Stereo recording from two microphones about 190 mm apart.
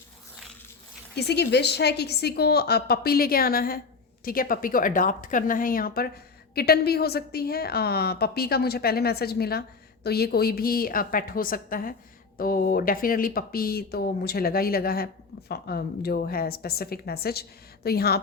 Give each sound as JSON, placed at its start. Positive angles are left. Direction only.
{"t": 1.1, "sound": "a woman's voice", "side_deg": 60}